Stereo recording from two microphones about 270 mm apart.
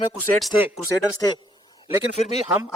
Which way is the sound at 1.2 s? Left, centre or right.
Centre.